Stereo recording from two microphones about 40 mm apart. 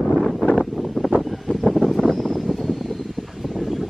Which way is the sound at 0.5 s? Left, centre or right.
Centre.